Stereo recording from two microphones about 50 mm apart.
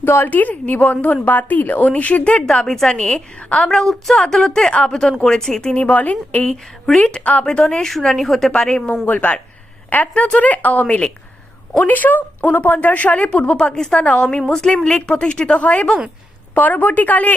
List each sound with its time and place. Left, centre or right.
0.0 s a woman's voice: left
3.7 s a woman's voice: centre
5.7 s speech: left
6.4 s a woman's voice: centre
7.0 s a woman's voice: left; by 8.9 s centre
9.0 s a woman's voice: left
10.8 s speech: left
11.8 s a woman's voice: left
13.6 s a woman's voice: centre
14.0 s speech: left
14.5 s a woman's voice: centre; by 17.3 s left